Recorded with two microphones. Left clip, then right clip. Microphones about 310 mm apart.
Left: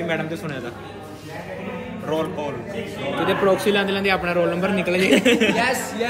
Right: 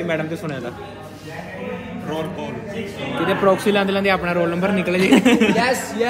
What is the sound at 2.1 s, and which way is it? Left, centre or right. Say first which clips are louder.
Speech: left 3 dB; left.